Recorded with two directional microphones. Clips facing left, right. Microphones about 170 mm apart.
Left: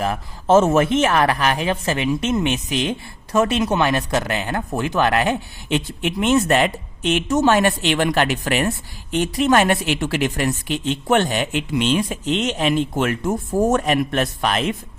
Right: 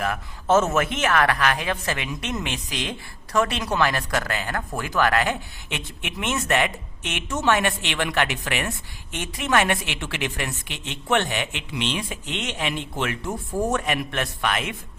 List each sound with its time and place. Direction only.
0.0 s a woman's voice: 30° left (ahead or behind)